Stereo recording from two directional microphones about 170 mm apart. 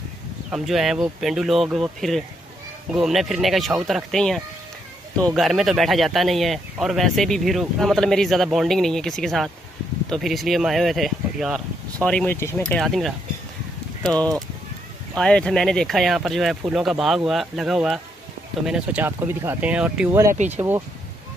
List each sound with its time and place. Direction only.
0.5 s speech: centre (ahead or behind)
12.6 s speech: centre (ahead or behind)
14.1 s speech: 25° right (ahead or behind)
15.1 s speech: 5° left (ahead or behind); by 20.8 s 10° right (ahead or behind)